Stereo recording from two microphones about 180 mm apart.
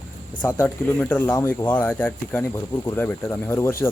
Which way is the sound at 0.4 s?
10° left (ahead or behind).